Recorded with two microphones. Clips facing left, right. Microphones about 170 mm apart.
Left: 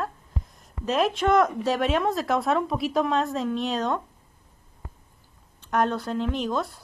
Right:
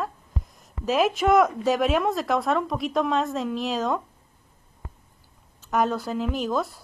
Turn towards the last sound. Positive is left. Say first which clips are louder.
# right 1 dB
turn(degrees=0)  # may be behind; listen again after turning